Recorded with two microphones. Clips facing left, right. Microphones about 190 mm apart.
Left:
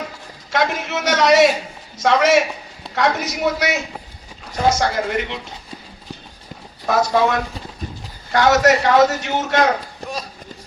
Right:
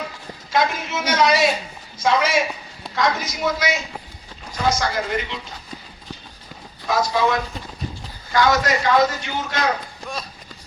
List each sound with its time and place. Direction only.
0.5 s a man's voice: 65° left (ahead or behind)
4.8 s a woman's voice: 60° left (ahead or behind)
6.9 s a woman's voice: 65° left (ahead or behind)